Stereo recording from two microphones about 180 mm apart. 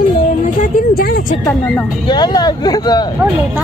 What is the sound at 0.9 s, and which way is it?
Speech, 60° left (ahead or behind).